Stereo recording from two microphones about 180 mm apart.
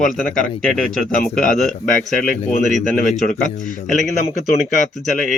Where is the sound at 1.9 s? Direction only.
50° left (ahead or behind).